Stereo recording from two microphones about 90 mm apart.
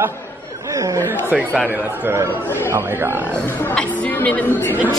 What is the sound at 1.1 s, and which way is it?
Snicker, 20° right (ahead or behind).